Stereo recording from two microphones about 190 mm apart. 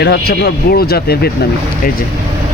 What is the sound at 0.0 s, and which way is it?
Speech, 55° left (ahead or behind).